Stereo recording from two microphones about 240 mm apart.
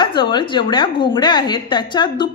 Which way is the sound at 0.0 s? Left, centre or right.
Centre.